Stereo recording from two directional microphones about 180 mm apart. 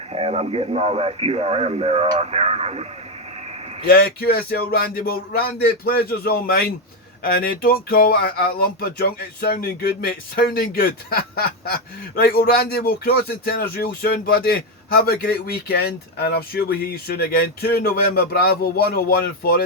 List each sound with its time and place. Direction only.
0.1 s speech: 35° right (ahead or behind)
3.8 s speech: 55° left (ahead or behind)